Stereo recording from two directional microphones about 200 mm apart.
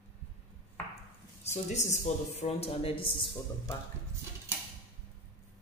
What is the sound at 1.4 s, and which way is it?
A man's voice, 35° left (ahead or behind).